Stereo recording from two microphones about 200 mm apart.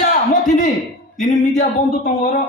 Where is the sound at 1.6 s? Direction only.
40° left (ahead or behind).